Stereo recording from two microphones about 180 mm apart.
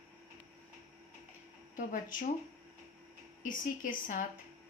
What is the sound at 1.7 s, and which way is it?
Speech, 45° left (ahead or behind).